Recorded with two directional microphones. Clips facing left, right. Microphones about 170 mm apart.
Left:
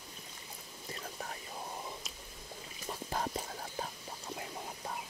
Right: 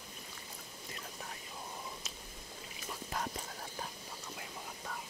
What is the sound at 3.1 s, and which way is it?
Whispering, 30° left (ahead or behind).